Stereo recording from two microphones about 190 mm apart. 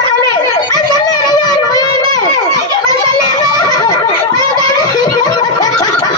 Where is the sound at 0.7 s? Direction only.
20° left (ahead or behind).